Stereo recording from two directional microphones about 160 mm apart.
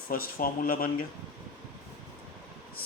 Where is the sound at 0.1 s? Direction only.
65° left (ahead or behind).